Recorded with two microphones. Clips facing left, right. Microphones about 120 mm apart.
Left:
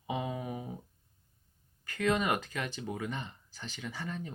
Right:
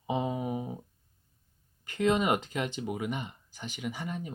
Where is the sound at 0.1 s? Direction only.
20° right (ahead or behind).